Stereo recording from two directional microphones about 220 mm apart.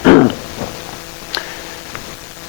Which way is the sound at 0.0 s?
25° left (ahead or behind).